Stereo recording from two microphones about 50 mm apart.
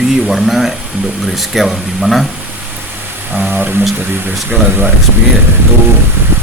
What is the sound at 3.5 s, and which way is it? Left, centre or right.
Speech, right.